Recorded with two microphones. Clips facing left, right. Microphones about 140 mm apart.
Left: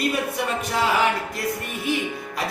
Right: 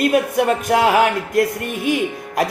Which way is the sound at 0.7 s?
60° right (ahead or behind).